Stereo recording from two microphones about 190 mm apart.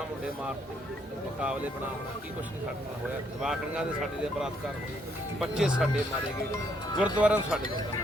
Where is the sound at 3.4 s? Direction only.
5° right (ahead or behind).